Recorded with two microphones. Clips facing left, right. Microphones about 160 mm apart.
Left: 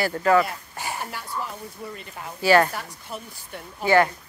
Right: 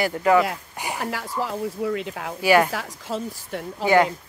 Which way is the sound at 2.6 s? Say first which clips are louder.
Right 5 dB; 90° right.